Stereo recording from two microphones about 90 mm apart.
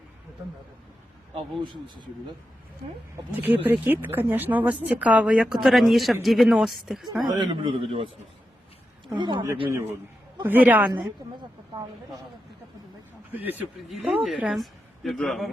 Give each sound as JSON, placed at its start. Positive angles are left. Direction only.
{"t": 1.4, "sound": "speech", "side_deg": -60}
{"t": 3.3, "sound": "speech", "side_deg": -20}
{"t": 7.2, "sound": "a man's voice", "side_deg": -60}
{"t": 9.1, "sound": "speech", "side_deg": -60}
{"t": 9.6, "sound": "a man's voice", "side_deg": -30}
{"t": 10.4, "sound": "speech", "side_deg": -20}
{"t": 13.3, "sound": "speech", "side_deg": -20}
{"t": 13.9, "sound": "a man's voice", "side_deg": -10}